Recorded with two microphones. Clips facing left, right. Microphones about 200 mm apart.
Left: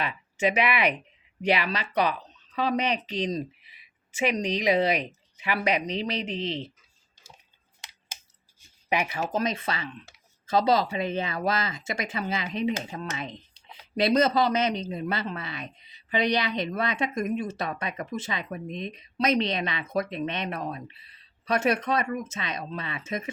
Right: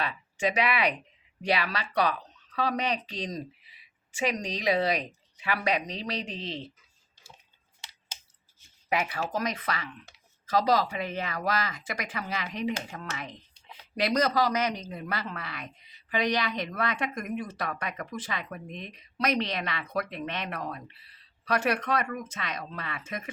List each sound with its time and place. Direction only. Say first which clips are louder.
0.3 s speech: left 2 dB; 20° left (ahead or behind)
8.9 s speech: left 2 dB; 20° left (ahead or behind)